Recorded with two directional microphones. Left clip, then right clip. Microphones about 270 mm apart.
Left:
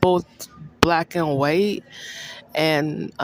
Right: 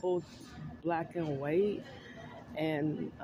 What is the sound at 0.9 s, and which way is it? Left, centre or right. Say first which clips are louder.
Speech: left 14 dB; left.